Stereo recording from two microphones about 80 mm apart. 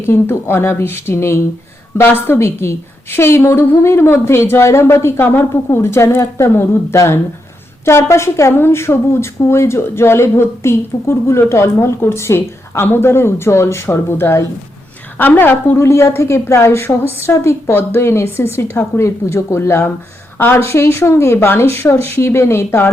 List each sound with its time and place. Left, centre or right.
0.0 s a woman's voice: left